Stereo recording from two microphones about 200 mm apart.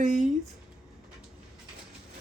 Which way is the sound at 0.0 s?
40° right (ahead or behind).